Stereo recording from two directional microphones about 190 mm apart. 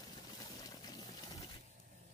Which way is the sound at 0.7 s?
20° left (ahead or behind).